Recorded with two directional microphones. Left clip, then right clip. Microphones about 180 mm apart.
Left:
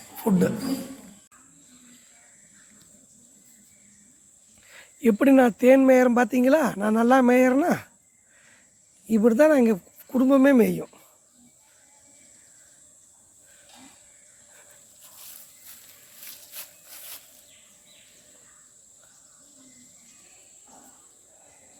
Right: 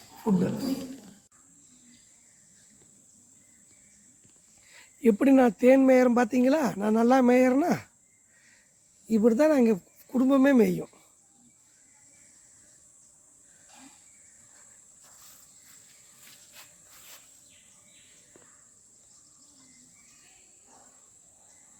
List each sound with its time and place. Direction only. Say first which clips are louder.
0.3 s speech: left 3 dB; 90° left
4.7 s speech: left 1 dB; 5° left (ahead or behind)
9.0 s speech: left 4 dB; 5° left (ahead or behind)
16.6 s sawing: left 7 dB; 65° left (ahead or behind)